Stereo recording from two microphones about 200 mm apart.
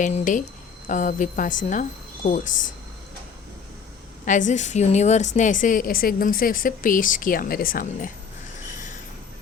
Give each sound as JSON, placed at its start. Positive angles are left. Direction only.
{"t": 0.0, "sound": "speech", "side_deg": 40}
{"t": 4.3, "sound": "a woman's voice", "side_deg": 40}